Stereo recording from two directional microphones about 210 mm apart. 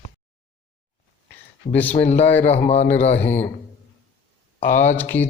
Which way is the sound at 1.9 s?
30° left (ahead or behind).